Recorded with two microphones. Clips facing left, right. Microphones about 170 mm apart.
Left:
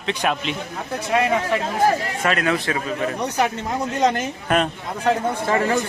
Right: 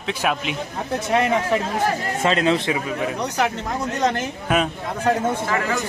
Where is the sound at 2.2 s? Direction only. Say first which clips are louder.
Right 3 dB; 25° right (ahead or behind).